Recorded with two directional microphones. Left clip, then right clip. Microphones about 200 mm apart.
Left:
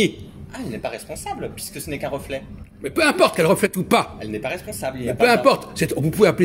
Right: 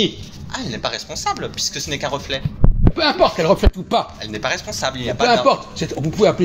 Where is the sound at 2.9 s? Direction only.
60° left (ahead or behind).